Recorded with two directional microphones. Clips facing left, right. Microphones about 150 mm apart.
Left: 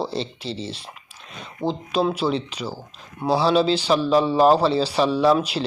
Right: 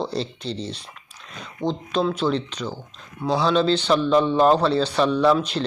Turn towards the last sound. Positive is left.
turn(degrees=10)  # may be behind; listen again after turning